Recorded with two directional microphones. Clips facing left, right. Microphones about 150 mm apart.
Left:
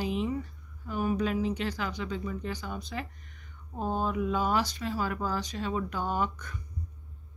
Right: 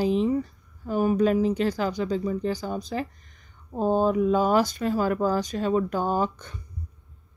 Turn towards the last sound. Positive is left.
turn(degrees=-30)  # may be behind; listen again after turning